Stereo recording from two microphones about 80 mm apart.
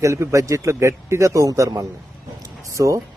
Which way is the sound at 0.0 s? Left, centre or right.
Right.